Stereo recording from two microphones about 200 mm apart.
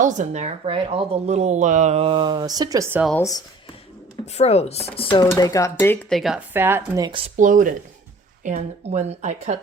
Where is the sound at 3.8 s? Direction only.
30° left (ahead or behind); by 7.1 s 10° right (ahead or behind).